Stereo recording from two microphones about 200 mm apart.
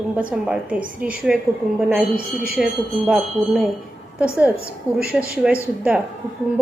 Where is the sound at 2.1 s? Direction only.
50° right (ahead or behind).